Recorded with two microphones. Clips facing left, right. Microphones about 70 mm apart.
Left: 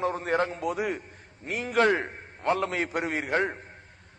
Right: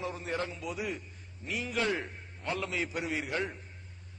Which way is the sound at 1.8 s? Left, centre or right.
Left.